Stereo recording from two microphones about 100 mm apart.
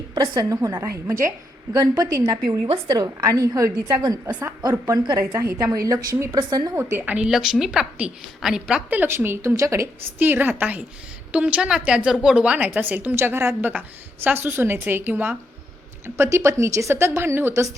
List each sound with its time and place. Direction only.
0.3 s a woman's voice: 35° right (ahead or behind)
1.7 s a woman's voice: 40° right (ahead or behind)
4.0 s a woman's voice: 45° right (ahead or behind)
5.2 s a woman's voice: 25° right (ahead or behind)
5.5 s a woman's voice: 35° right (ahead or behind); by 7.3 s 15° right (ahead or behind)
7.3 s a woman's voice: 5° right (ahead or behind)
8.9 s a woman's voice: 20° right (ahead or behind)
10.2 s a woman's voice: 20° right (ahead or behind)